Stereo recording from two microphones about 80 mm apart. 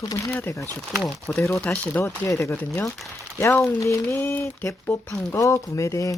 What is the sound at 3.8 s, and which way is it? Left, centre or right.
Speech, left.